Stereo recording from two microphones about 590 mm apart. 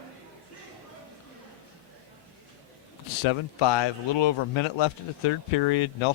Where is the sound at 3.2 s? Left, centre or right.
Left.